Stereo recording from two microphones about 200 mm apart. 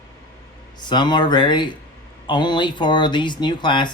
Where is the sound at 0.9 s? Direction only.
20° left (ahead or behind).